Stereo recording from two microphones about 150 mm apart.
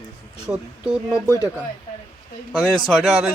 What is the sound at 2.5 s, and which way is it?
Speech, 5° left (ahead or behind).